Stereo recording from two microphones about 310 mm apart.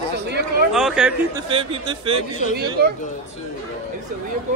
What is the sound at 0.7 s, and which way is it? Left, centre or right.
Speech, centre.